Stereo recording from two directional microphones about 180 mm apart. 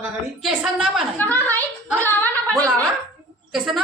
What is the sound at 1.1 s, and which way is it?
A woman's voice, 10° left (ahead or behind).